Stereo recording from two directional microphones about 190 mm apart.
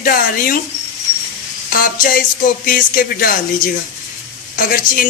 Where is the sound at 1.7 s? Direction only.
50° left (ahead or behind).